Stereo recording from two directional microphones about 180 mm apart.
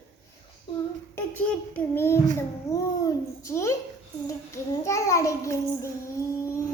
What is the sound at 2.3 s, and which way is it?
Babbling, 15° left (ahead or behind).